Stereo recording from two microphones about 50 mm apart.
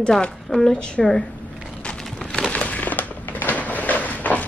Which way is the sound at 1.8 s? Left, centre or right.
Centre.